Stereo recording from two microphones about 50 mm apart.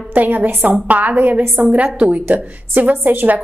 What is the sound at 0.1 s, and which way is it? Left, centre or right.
A woman's voice, right.